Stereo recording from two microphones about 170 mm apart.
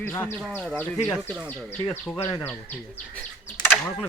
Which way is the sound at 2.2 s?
30° left (ahead or behind).